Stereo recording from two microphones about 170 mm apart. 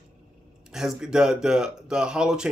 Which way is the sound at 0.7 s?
5° right (ahead or behind).